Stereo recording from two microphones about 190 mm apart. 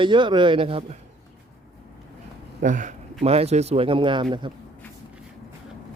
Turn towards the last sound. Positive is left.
turn(degrees=-25)  # may be behind; listen again after turning